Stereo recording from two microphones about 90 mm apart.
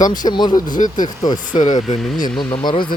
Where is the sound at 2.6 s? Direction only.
60° left (ahead or behind).